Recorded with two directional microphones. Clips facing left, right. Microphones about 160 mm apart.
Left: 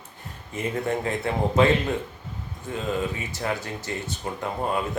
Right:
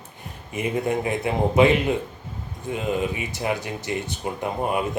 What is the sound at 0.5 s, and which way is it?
A man's voice, 15° right (ahead or behind).